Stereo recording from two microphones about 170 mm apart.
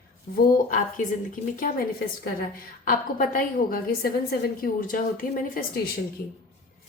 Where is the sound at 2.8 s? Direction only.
55° left (ahead or behind).